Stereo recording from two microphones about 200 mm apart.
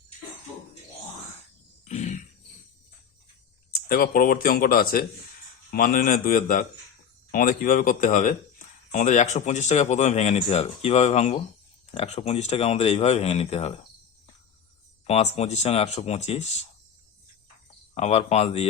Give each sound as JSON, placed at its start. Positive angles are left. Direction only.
{"t": 1.8, "sound": "a sound", "side_deg": 35}
{"t": 3.8, "sound": "speech", "side_deg": 45}
{"t": 15.0, "sound": "speech", "side_deg": 30}
{"t": 17.9, "sound": "speech", "side_deg": 35}